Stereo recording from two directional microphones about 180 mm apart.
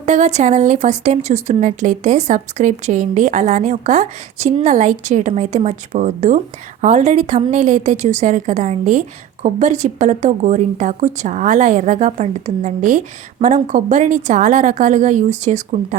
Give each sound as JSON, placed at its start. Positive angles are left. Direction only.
{"t": 0.0, "sound": "a woman's voice", "side_deg": -40}